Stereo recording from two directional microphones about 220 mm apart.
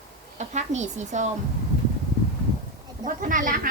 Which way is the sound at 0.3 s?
30° right (ahead or behind).